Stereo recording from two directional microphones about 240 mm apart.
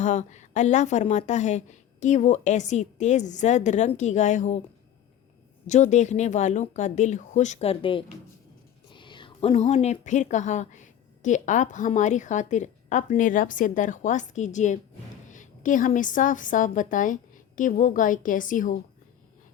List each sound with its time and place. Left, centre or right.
0.0 s a woman's voice: left
5.6 s a woman's voice: left